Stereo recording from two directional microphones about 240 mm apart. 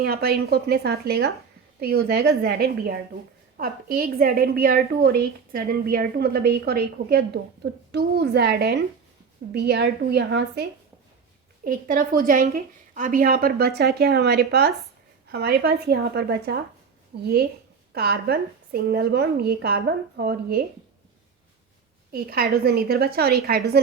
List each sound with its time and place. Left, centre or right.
0.0 s a woman's voice: right
22.1 s a woman's voice: right